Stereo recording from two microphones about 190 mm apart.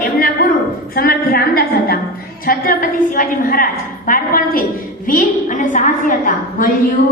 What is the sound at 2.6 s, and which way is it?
A woman's voice, 45° left (ahead or behind).